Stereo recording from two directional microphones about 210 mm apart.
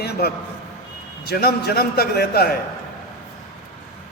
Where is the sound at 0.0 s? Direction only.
50° left (ahead or behind).